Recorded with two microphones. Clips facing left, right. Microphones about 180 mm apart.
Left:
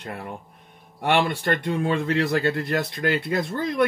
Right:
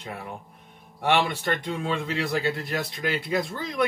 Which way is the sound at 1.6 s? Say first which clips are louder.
Left 5 dB; 55° left (ahead or behind).